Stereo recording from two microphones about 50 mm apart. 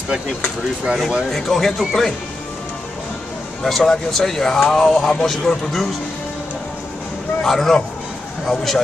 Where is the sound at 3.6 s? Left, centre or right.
Centre.